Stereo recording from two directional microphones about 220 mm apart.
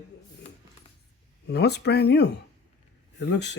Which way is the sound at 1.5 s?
50° left (ahead or behind).